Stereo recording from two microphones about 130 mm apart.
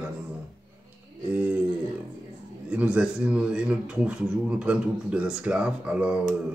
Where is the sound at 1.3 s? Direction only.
10° right (ahead or behind).